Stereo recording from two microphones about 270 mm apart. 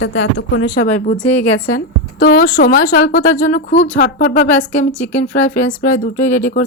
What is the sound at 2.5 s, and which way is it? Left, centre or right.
A woman's voice, left.